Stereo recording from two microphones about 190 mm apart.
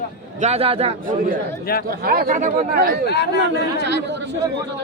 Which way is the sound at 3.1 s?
60° left (ahead or behind).